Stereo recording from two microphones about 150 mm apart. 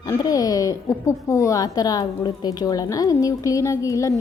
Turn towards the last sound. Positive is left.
turn(degrees=20)  # may be behind; listen again after turning